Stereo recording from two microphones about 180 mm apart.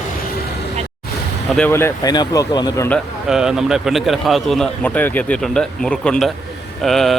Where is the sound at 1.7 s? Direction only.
15° left (ahead or behind).